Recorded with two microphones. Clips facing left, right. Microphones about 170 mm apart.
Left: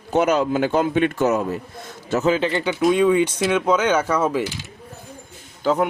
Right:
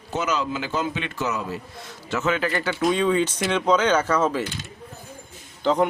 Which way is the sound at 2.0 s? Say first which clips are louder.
Left 5 dB; 35° left (ahead or behind).